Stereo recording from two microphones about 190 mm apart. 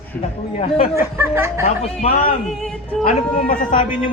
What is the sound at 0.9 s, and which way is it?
Speech, 15° right (ahead or behind).